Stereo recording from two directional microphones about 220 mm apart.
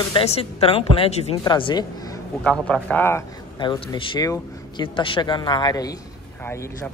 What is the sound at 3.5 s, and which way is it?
Speech, 20° left (ahead or behind).